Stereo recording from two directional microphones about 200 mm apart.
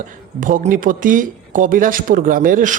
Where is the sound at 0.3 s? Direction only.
40° right (ahead or behind).